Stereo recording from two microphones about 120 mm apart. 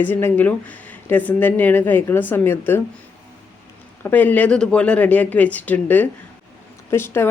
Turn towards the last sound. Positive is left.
turn(degrees=20)  # may be behind; listen again after turning